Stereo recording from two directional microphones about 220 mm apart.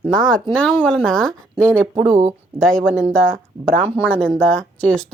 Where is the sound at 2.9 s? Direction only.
Centre (ahead or behind).